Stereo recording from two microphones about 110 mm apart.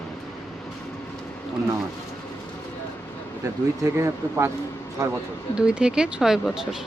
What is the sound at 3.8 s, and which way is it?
Speech, 25° right (ahead or behind).